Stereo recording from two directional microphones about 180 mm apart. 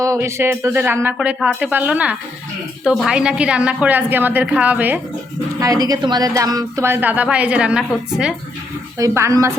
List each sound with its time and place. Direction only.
0.0 s a woman's voice: 15° right (ahead or behind)
5.5 s a woman's voice: 20° right (ahead or behind); by 8.4 s 5° right (ahead or behind)
9.0 s a woman's voice: 15° right (ahead or behind)